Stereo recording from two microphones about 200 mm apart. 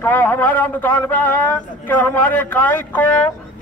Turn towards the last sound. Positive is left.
turn(degrees=10)  # may be behind; listen again after turning